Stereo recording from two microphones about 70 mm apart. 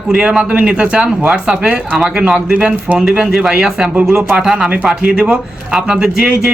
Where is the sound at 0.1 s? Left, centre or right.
Centre.